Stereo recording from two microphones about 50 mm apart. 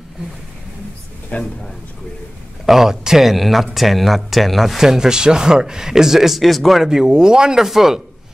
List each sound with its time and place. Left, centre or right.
1.3 s a man's voice: left
2.6 s a man's voice: centre